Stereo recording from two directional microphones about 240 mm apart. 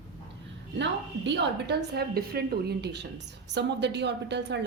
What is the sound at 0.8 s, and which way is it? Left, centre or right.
A woman's voice, right.